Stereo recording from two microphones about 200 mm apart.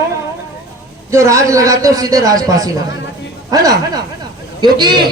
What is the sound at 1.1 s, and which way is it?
A man's voice, 15° right (ahead or behind).